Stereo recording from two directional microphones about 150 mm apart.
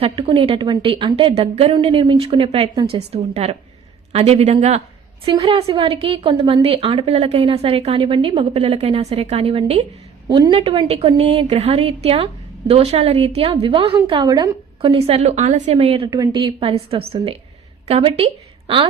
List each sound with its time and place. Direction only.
0.0 s a woman's voice: 35° right (ahead or behind)
5.2 s a woman's voice: 35° right (ahead or behind)
16.1 s a woman's voice: 30° right (ahead or behind)